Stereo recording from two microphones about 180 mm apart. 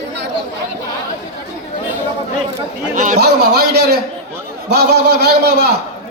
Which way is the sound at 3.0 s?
45° right (ahead or behind).